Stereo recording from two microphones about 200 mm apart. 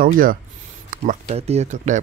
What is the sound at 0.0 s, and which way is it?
Speech, 45° right (ahead or behind).